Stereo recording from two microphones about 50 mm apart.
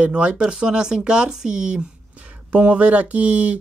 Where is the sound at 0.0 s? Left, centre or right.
Right.